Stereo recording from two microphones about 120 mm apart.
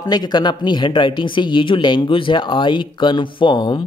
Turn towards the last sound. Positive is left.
turn(degrees=40)  # may be behind; listen again after turning